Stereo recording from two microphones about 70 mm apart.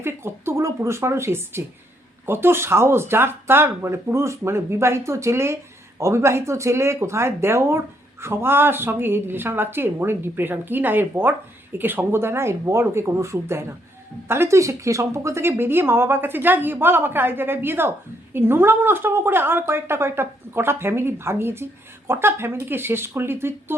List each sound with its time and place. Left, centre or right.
0.0 s a woman's voice: right